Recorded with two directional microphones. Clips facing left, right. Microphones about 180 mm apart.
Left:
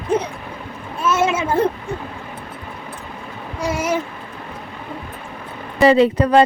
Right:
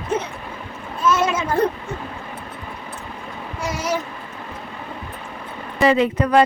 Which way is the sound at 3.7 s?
25° left (ahead or behind).